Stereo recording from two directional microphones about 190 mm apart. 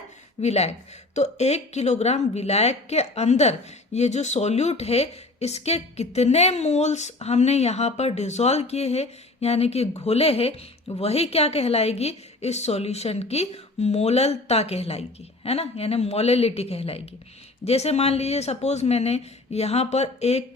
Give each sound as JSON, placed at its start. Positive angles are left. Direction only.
{"t": 0.4, "sound": "a woman's voice", "side_deg": 35}